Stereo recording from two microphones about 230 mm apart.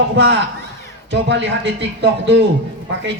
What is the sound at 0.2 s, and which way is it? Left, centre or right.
A man's voice, right.